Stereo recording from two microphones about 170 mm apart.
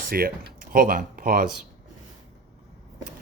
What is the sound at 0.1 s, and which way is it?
Speech, 60° right (ahead or behind).